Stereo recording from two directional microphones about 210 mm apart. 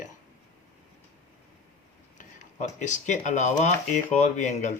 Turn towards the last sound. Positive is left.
turn(degrees=35)  # may be behind; listen again after turning